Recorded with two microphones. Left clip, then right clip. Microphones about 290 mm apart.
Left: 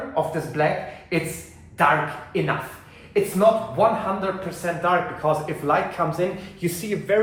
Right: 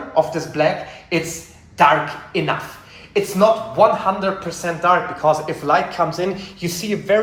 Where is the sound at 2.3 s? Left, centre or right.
Centre.